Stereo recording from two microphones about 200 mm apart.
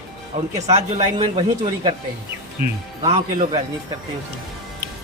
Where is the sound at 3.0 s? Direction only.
30° right (ahead or behind).